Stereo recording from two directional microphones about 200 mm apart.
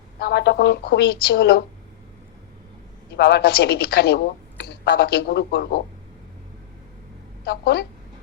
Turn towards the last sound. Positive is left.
turn(degrees=55)  # may be behind; listen again after turning